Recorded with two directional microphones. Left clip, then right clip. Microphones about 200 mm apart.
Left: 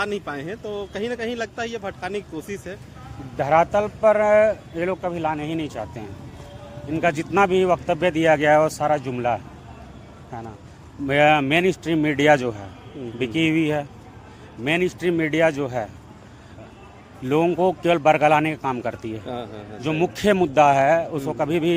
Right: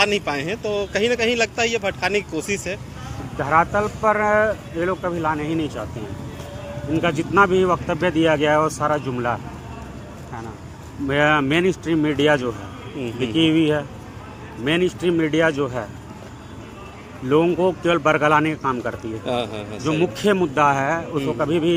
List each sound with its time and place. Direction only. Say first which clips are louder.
0.0 s speech: right 7 dB; 20° left (ahead or behind)
3.3 s speech: even; 65° left (ahead or behind)
7.0 s speech: right 2 dB; 55° left (ahead or behind)
11.1 s speech: left 1 dB; 55° left (ahead or behind)
17.2 s speech: right 2 dB; 55° left (ahead or behind)
19.2 s a man's voice: right 8 dB; 15° left (ahead or behind)
19.8 s speech: right 1 dB; 55° left (ahead or behind)